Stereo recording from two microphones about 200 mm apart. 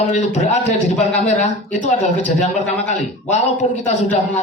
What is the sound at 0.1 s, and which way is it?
A man's voice, 35° left (ahead or behind).